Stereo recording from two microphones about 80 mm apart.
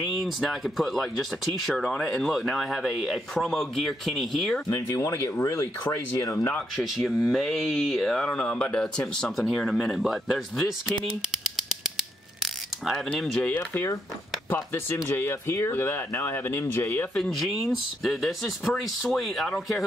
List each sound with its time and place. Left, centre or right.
0.0 s speech: centre
4.6 s speech: left
6.8 s speech: centre
12.4 s mechanisms: centre
13.1 s speech: centre; by 17.1 s left
17.1 s speech: centre